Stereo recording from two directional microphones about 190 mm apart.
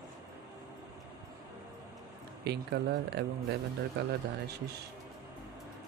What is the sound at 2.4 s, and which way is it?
Speech, 60° right (ahead or behind).